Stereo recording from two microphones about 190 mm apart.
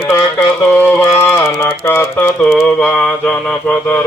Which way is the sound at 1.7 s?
10° left (ahead or behind).